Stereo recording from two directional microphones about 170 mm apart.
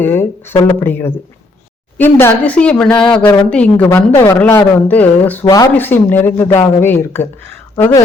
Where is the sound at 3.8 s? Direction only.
20° left (ahead or behind).